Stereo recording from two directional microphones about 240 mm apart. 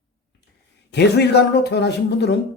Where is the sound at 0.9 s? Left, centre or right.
Left.